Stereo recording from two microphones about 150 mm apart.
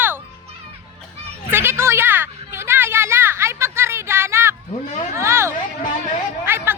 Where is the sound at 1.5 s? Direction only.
15° right (ahead or behind).